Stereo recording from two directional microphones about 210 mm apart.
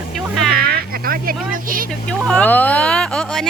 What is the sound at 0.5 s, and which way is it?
Speech, 45° right (ahead or behind).